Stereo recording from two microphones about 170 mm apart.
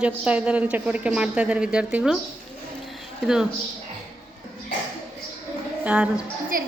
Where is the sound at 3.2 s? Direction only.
5° right (ahead or behind).